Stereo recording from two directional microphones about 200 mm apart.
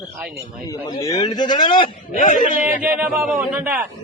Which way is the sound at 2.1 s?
40° left (ahead or behind).